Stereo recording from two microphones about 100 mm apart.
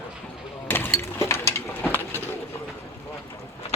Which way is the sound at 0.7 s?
25° left (ahead or behind).